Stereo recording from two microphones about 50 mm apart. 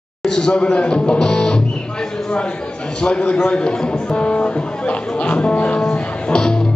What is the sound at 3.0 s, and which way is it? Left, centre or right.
A man's voice, centre.